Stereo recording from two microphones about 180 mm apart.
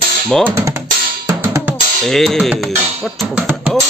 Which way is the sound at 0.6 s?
15° right (ahead or behind).